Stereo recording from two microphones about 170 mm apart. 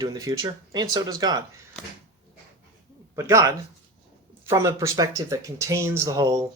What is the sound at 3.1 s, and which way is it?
Speech, 15° right (ahead or behind).